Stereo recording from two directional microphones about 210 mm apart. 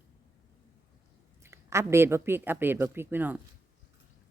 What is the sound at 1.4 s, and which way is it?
Speech, 15° right (ahead or behind).